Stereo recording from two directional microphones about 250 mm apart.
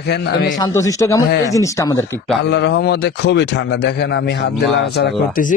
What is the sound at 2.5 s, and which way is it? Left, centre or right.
A man's voice, left.